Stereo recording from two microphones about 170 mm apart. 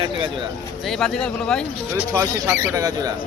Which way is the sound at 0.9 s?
5° left (ahead or behind).